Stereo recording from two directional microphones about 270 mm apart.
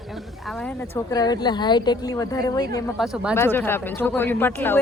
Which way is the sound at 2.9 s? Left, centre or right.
Centre.